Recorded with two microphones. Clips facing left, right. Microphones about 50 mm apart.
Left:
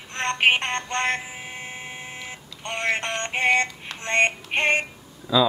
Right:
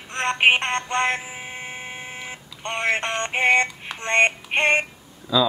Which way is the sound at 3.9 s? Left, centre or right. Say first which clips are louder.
Right 2 dB; right.